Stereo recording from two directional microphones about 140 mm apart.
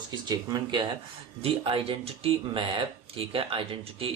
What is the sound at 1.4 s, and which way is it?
Speech, 40° right (ahead or behind).